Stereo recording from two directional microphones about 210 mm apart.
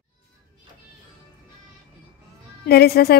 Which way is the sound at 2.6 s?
45° left (ahead or behind).